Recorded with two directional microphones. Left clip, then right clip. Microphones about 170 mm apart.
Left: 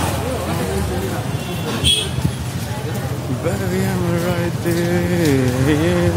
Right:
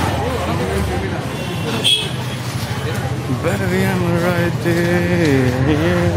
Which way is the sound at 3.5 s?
5° left (ahead or behind).